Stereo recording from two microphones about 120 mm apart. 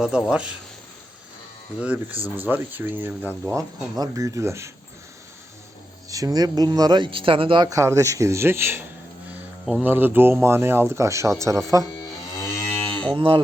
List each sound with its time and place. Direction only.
0.0 s speech: 5° right (ahead or behind)
1.8 s speech: 10° right (ahead or behind)
3.5 s speech: 30° right (ahead or behind)
6.1 s a man's voice: 30° right (ahead or behind)
7.7 s speech: 25° right (ahead or behind)
12.6 s moo: 5° left (ahead or behind)
13.1 s cattle: 45° right (ahead or behind)